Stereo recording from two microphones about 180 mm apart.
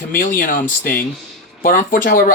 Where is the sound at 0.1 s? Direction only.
50° left (ahead or behind).